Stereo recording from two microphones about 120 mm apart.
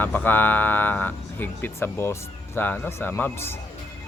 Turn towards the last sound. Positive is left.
turn(degrees=20)  # may be behind; listen again after turning